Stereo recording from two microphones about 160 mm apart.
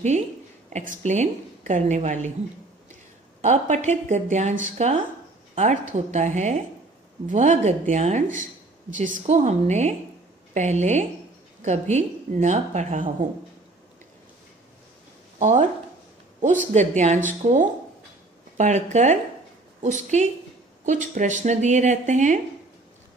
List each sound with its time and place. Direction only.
0.7 s speech: 45° right (ahead or behind)
3.3 s speech: 45° right (ahead or behind)
15.3 s a sound: 50° right (ahead or behind)
16.7 s speech: 45° right (ahead or behind)